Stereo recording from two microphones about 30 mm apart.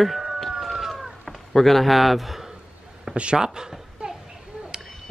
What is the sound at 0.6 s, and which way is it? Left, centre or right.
Chicken, centre.